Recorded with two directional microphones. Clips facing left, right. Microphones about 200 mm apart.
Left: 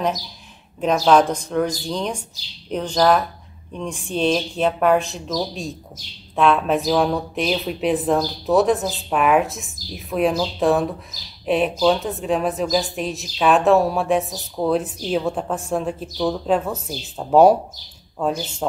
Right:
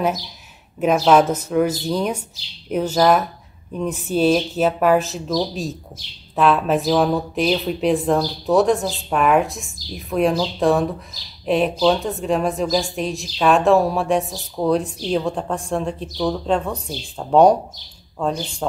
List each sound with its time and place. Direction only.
0.7 s a woman's voice: 5° right (ahead or behind)